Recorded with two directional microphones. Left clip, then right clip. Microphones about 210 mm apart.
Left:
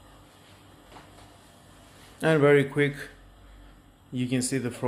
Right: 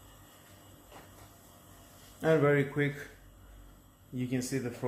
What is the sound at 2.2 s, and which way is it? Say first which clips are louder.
Speech: left 6 dB; 45° left (ahead or behind).